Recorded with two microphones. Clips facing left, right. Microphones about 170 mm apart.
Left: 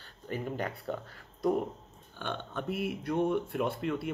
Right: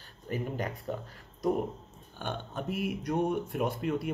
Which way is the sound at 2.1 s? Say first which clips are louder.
Even; 45° right (ahead or behind).